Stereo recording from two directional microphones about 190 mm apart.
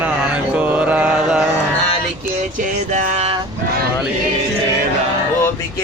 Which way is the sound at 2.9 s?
35° right (ahead or behind).